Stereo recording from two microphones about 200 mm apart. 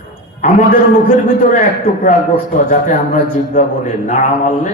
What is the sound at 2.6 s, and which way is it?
A man's voice, 40° left (ahead or behind).